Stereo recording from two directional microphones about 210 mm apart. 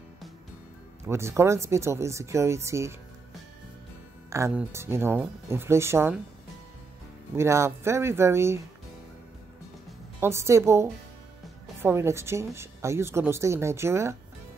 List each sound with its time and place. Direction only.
1.0 s a woman's voice: 10° right (ahead or behind)
4.3 s a woman's voice: 10° right (ahead or behind)
7.3 s a woman's voice: 15° right (ahead or behind)
10.2 s a woman's voice: 10° right (ahead or behind)